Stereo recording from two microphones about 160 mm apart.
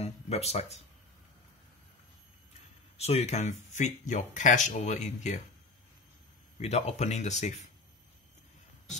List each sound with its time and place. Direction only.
0.0 s speech: 40° left (ahead or behind)
3.0 s speech: 40° left (ahead or behind)
6.6 s speech: 40° left (ahead or behind)